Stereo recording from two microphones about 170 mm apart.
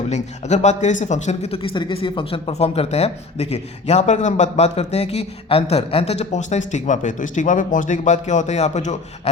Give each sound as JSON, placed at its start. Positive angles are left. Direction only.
{"t": 0.1, "sound": "speech", "side_deg": 45}